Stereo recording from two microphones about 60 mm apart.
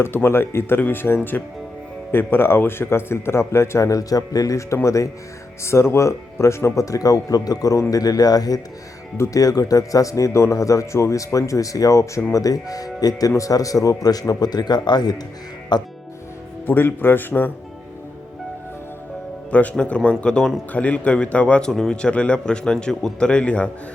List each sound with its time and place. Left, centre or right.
0.0 s a man's voice: left
3.8 s speech: left
5.6 s a man's voice: left
6.8 s speech: left
12.3 s speech: left
16.6 s speech: left
19.5 s a man's voice: left
23.3 s a man's voice: left